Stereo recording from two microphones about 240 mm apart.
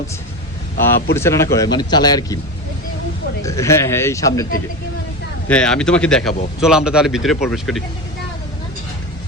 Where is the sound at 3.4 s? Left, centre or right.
Centre.